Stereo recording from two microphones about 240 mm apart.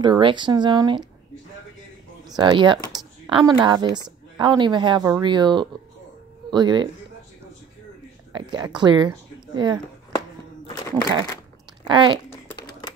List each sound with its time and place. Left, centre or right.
0.0 s a woman's voice: centre
2.2 s a woman's voice: centre
8.3 s a woman's voice: centre
10.7 s a sound: centre
11.9 s a woman's voice: centre
12.4 s a sound: centre